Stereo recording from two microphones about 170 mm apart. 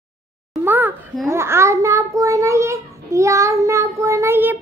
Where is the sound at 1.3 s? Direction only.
15° right (ahead or behind).